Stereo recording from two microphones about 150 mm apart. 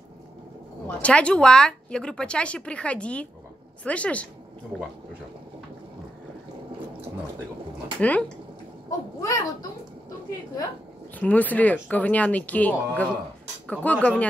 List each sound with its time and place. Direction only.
0.8 s speech: 10° left (ahead or behind)
8.0 s speech: 10° left (ahead or behind)
9.2 s a child's voice: 20° left (ahead or behind)
11.1 s speech: 10° left (ahead or behind)